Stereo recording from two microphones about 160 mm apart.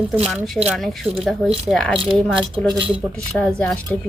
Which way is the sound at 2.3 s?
35° right (ahead or behind).